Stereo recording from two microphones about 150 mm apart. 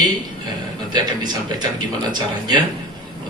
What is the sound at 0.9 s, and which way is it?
A man's voice, 30° right (ahead or behind).